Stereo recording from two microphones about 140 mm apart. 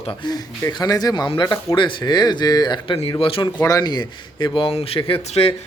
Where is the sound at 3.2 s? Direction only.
40° left (ahead or behind).